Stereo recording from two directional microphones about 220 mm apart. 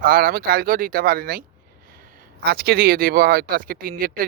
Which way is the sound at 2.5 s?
45° right (ahead or behind).